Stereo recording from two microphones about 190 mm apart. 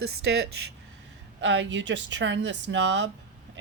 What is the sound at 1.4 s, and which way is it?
Speech, 70° right (ahead or behind).